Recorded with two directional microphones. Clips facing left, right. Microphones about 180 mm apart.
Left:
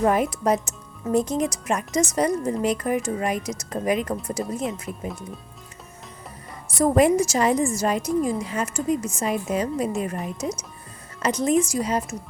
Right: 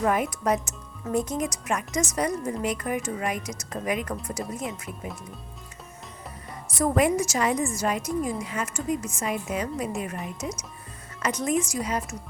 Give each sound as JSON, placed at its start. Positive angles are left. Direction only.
{"t": 0.0, "sound": "a woman's voice", "side_deg": 30}
{"t": 6.7, "sound": "a woman's voice", "side_deg": 30}